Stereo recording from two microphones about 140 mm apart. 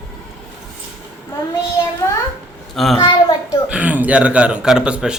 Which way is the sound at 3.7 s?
10° right (ahead or behind).